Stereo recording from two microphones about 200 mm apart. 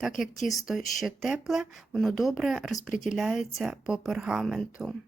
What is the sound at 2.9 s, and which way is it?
Speech, 40° left (ahead or behind).